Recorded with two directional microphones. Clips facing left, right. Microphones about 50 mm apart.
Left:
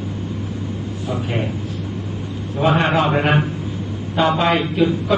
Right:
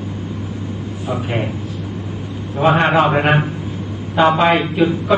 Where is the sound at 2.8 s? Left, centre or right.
Centre.